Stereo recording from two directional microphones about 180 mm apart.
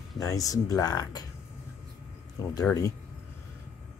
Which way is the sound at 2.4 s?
20° left (ahead or behind).